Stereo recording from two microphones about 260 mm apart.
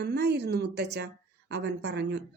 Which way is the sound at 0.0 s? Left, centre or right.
Right.